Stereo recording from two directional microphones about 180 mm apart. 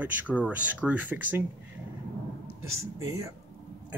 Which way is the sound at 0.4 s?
10° right (ahead or behind).